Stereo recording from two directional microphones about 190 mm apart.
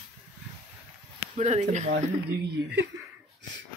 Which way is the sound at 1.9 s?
55° right (ahead or behind).